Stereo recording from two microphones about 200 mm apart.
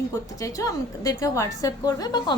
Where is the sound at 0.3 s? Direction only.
15° left (ahead or behind).